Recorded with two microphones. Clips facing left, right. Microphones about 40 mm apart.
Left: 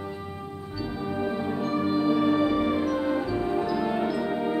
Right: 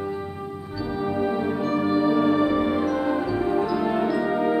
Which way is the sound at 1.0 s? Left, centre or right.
Centre.